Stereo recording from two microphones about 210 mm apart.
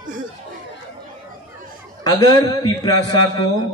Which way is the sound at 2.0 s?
15° left (ahead or behind).